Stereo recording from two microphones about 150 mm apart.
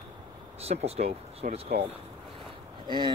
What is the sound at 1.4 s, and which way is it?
Speech, 60° right (ahead or behind).